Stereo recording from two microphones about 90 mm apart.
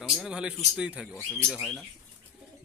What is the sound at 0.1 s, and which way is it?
Speech, 5° right (ahead or behind).